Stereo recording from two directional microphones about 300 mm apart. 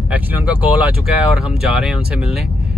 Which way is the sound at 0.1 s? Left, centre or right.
Centre.